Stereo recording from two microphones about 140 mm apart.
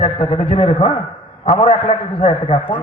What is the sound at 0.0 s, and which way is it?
A man's voice, 45° left (ahead or behind).